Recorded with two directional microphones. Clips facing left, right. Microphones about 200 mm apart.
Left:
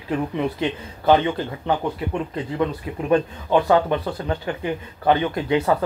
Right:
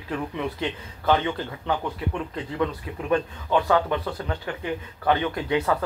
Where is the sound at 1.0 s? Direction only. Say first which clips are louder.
Left 5 dB; 25° left (ahead or behind).